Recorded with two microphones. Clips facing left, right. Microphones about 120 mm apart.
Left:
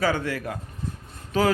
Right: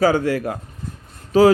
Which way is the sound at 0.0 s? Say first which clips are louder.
Right 8 dB; 45° right (ahead or behind).